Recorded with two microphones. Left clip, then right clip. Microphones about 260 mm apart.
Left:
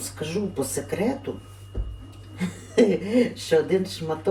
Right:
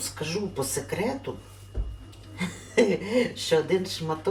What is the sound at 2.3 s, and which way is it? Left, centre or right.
Speech, centre.